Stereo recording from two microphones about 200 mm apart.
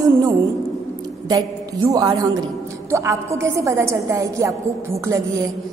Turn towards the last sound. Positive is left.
turn(degrees=-15)  # may be behind; listen again after turning